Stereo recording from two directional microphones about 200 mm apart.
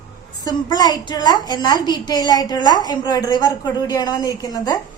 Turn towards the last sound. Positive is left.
turn(degrees=20)  # may be behind; listen again after turning